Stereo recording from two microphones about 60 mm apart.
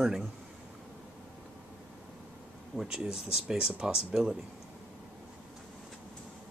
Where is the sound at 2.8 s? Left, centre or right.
Centre.